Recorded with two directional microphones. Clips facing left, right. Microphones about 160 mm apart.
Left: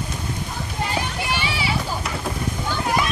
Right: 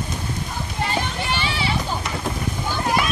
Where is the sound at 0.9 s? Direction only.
10° left (ahead or behind).